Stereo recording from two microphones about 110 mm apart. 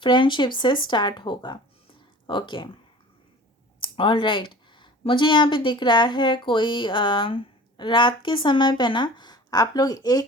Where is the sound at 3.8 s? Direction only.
50° left (ahead or behind).